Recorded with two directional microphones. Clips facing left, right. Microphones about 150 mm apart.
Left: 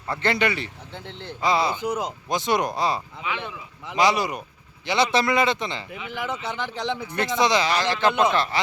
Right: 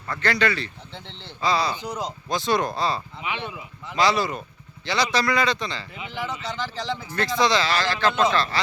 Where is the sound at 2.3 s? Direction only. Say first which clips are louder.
Even; 20° left (ahead or behind).